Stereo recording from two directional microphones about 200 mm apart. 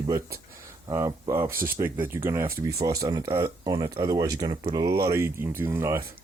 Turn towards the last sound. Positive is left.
turn(degrees=-15)  # may be behind; listen again after turning